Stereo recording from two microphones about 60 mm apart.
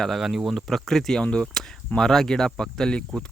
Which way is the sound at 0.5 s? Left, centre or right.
Centre.